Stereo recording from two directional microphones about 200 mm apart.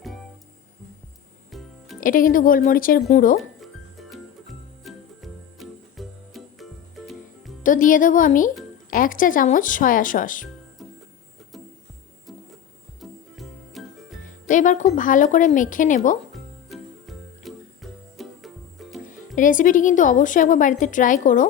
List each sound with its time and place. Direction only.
1.5 s music: centre (ahead or behind)
2.0 s speech: 45° left (ahead or behind)
3.6 s music: centre (ahead or behind)
7.6 s a woman's voice: 40° left (ahead or behind)
13.0 s music: centre (ahead or behind)
14.3 s a woman's voice: 40° left (ahead or behind)
16.3 s music: centre (ahead or behind)
19.4 s a woman's voice: 40° left (ahead or behind)